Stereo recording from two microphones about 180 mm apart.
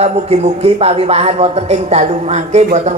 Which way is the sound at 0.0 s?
35° right (ahead or behind).